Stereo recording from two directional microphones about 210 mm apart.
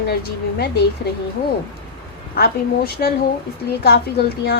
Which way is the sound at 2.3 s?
45° left (ahead or behind).